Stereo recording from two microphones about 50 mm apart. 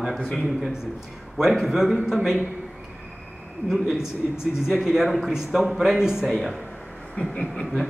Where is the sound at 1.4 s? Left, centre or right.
Centre.